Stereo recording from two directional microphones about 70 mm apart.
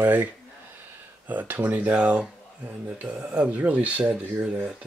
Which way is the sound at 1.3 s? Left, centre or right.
Right.